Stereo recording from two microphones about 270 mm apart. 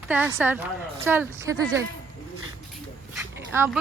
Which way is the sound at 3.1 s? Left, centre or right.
Centre.